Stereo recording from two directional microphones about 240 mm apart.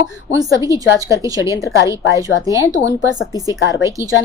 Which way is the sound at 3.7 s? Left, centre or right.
Centre.